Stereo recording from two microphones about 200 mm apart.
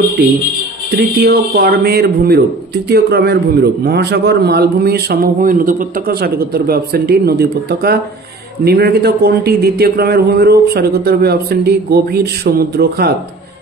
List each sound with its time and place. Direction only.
0.2 s a man's voice: 50° right (ahead or behind)